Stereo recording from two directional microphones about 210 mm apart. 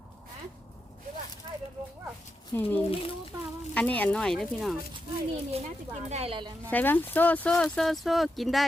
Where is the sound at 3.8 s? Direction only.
10° left (ahead or behind).